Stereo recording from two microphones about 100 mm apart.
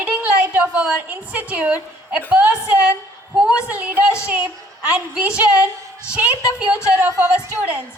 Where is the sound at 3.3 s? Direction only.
10° right (ahead or behind).